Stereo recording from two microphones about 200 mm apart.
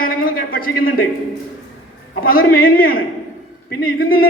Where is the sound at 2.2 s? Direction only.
45° left (ahead or behind).